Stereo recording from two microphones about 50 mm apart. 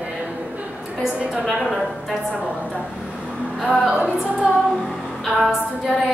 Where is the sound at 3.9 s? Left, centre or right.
Right.